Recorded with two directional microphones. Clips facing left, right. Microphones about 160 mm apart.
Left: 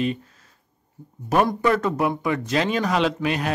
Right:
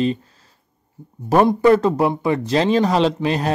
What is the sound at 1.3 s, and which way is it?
A man's voice, 30° right (ahead or behind).